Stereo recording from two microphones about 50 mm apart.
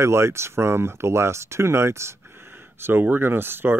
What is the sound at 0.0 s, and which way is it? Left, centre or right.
Speech, right.